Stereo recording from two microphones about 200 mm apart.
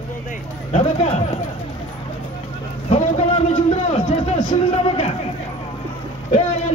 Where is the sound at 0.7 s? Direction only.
30° left (ahead or behind).